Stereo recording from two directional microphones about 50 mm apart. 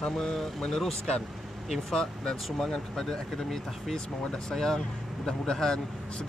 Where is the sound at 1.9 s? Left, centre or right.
Centre.